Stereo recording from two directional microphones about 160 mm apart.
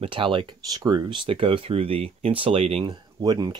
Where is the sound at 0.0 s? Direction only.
30° right (ahead or behind).